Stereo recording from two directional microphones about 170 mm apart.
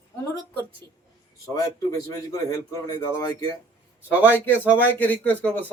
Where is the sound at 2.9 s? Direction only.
20° left (ahead or behind).